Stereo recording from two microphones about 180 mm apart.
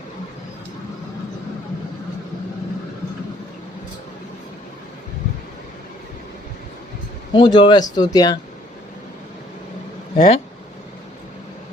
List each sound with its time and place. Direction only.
7.3 s speech: 30° left (ahead or behind)
10.2 s speech: 35° left (ahead or behind)